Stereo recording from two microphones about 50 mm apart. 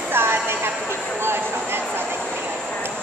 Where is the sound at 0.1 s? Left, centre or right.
Right.